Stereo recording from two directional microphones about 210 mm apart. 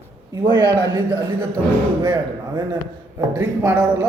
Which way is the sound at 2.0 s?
20° right (ahead or behind).